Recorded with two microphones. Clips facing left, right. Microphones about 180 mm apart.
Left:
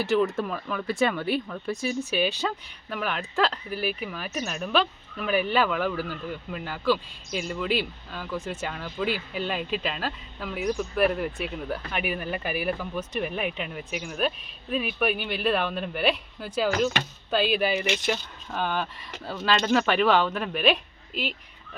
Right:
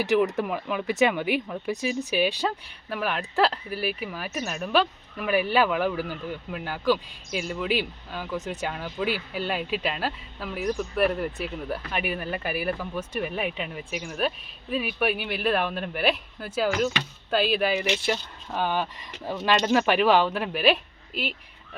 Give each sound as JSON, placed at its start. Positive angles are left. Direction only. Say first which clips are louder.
{"t": 0.0, "sound": "speech", "louder": "right 1 dB", "side_deg": -15}
{"t": 18.0, "sound": "speech", "louder": "right 1 dB", "side_deg": -10}